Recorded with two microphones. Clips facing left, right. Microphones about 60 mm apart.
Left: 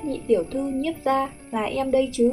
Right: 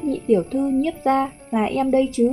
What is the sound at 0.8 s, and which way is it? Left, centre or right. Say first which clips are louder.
Speech: right 2 dB; right.